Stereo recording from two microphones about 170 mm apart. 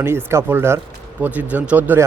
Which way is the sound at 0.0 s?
15° right (ahead or behind).